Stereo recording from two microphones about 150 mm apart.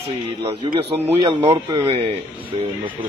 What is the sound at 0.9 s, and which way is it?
Speech, 15° right (ahead or behind).